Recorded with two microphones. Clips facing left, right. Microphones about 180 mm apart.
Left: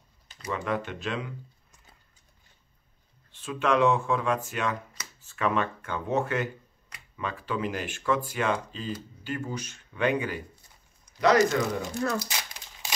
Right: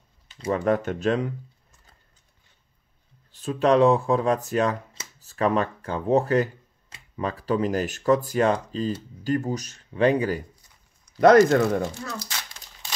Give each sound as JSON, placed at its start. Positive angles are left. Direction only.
{"t": 0.5, "sound": "speech", "side_deg": -45}
{"t": 3.3, "sound": "speech", "side_deg": -40}
{"t": 11.1, "sound": "speech", "side_deg": -50}
{"t": 12.3, "sound": "crumpling", "side_deg": 10}